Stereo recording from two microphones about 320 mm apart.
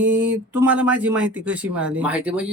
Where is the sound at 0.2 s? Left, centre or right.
Right.